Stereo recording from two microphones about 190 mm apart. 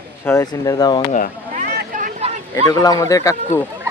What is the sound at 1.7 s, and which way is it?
Vehicle, 45° right (ahead or behind).